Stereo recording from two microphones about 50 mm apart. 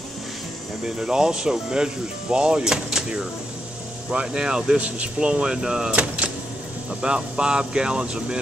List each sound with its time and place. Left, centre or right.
0.8 s speech: centre
4.7 s speech: right
5.9 s speech: right